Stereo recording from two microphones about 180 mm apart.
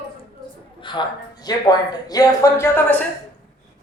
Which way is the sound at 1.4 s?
20° left (ahead or behind).